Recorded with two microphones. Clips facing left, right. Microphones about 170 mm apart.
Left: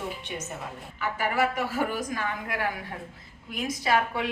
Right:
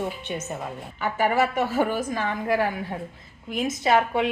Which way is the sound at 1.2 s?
25° right (ahead or behind).